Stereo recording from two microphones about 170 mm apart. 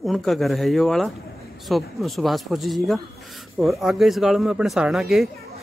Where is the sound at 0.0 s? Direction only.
Centre (ahead or behind).